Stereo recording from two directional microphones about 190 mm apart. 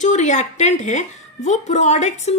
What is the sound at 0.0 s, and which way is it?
A woman's voice, 40° left (ahead or behind).